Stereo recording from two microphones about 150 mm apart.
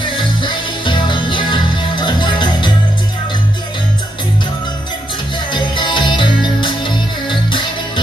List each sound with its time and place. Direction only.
0.0 s music: 30° left (ahead or behind)
5.5 s music: 30° left (ahead or behind)